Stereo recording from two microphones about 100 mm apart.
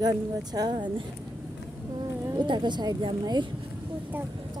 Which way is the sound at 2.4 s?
50° right (ahead or behind).